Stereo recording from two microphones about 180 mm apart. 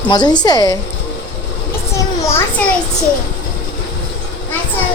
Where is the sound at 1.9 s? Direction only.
15° left (ahead or behind).